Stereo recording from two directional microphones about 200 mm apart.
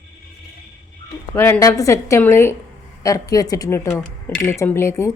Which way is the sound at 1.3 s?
10° left (ahead or behind).